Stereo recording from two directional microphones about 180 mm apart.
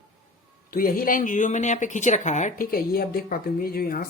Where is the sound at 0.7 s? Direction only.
55° left (ahead or behind).